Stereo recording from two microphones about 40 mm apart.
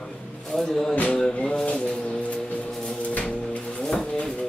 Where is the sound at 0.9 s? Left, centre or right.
Left.